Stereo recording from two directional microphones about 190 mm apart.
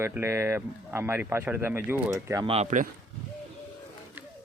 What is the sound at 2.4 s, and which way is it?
Speech, 35° right (ahead or behind).